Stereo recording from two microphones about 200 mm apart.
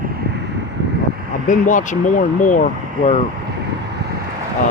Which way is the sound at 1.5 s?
40° left (ahead or behind).